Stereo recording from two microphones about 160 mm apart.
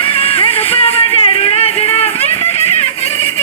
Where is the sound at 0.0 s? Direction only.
35° left (ahead or behind).